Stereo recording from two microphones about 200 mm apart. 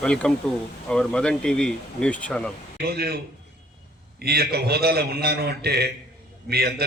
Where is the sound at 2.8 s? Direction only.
50° right (ahead or behind).